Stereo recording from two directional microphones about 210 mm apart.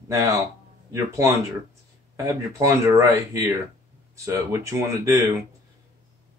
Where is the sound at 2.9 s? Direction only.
15° right (ahead or behind).